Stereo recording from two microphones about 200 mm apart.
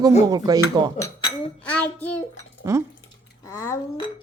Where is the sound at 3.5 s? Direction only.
15° left (ahead or behind).